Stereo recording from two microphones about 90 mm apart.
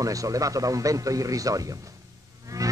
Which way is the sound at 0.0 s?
40° right (ahead or behind).